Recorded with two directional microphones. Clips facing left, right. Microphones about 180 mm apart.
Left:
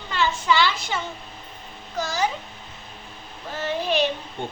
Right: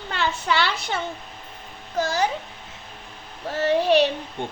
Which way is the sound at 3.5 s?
70° right (ahead or behind).